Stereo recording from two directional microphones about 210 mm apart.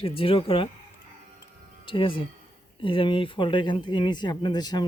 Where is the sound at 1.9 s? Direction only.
25° left (ahead or behind).